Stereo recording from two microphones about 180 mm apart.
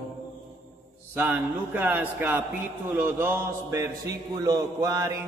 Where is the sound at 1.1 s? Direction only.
10° right (ahead or behind).